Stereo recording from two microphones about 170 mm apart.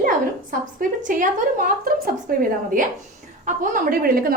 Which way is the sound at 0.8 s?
50° right (ahead or behind).